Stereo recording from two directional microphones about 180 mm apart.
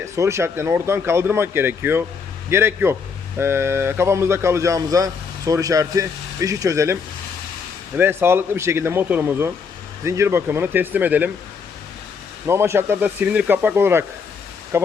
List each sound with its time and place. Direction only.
0.0 s speech: 15° right (ahead or behind)
12.5 s speech: 15° right (ahead or behind)